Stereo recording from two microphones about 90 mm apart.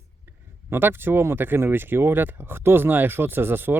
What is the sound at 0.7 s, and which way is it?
Speech, 25° right (ahead or behind).